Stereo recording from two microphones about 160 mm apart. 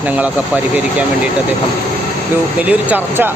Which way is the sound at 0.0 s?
10° right (ahead or behind).